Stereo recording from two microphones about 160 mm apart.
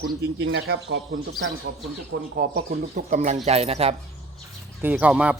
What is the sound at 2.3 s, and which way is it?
Speech, 65° right (ahead or behind).